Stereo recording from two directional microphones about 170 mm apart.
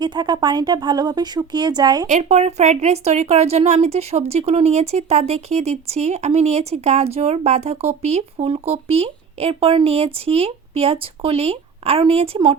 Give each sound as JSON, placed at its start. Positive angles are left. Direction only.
{"t": 0.0, "sound": "speech", "side_deg": -25}
{"t": 2.0, "sound": "speech", "side_deg": -45}